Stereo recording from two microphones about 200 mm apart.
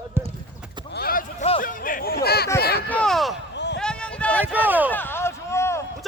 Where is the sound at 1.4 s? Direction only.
40° left (ahead or behind).